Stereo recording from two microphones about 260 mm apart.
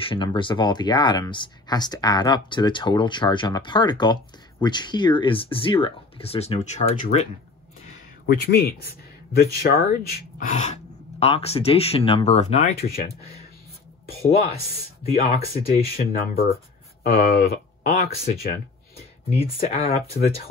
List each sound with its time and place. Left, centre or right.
0.0 s speech: centre
8.3 s speech: left
15.5 s speech: left
16.1 s speech: left
19.3 s speech: left